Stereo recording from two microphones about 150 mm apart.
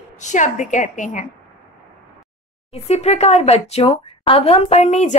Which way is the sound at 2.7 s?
45° left (ahead or behind).